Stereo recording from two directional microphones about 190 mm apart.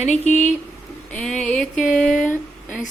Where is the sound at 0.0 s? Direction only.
35° left (ahead or behind).